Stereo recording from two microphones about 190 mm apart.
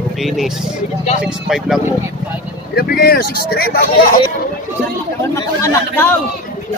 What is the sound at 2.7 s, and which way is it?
Speech, 55° left (ahead or behind).